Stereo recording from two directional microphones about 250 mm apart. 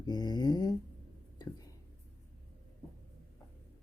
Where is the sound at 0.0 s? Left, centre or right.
Centre.